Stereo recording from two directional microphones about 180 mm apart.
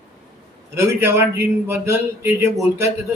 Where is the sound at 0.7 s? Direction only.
15° right (ahead or behind).